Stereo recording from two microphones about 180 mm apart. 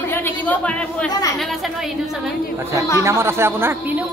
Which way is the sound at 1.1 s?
20° left (ahead or behind).